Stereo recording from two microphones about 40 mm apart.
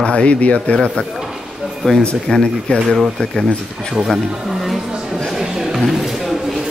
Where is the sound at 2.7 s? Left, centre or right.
Left.